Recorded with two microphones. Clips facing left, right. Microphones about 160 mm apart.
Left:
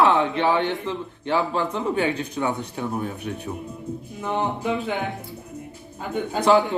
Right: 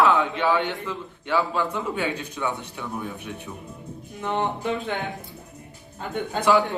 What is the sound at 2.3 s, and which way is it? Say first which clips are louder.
Speech: left 4 dB; 40° left (ahead or behind).